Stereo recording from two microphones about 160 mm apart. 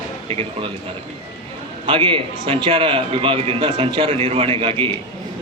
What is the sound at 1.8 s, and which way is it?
A man's voice, 35° right (ahead or behind).